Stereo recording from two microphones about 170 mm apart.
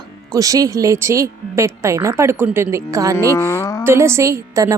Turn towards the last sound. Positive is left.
turn(degrees=-20)  # may be behind; listen again after turning